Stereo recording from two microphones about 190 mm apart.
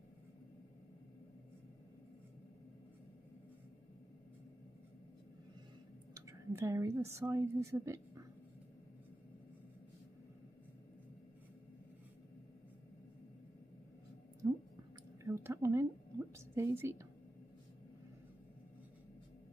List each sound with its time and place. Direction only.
6.1 s a woman's voice: 15° right (ahead or behind)
14.4 s chewing: 20° right (ahead or behind)
15.2 s a woman's voice: 15° right (ahead or behind)